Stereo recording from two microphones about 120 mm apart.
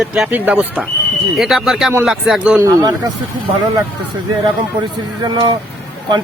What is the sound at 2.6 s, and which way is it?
Speech, 35° right (ahead or behind).